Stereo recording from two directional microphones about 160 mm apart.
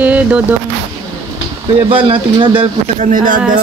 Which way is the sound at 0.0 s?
10° right (ahead or behind).